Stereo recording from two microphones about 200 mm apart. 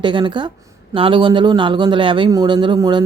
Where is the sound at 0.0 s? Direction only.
25° right (ahead or behind).